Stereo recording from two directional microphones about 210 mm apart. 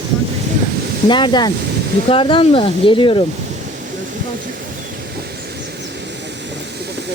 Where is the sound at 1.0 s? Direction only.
20° left (ahead or behind).